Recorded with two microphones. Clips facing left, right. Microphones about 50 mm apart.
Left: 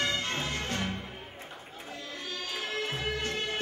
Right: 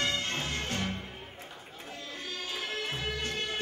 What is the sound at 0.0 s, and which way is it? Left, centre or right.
Music, left.